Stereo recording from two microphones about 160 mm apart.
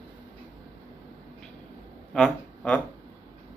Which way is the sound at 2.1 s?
5° left (ahead or behind).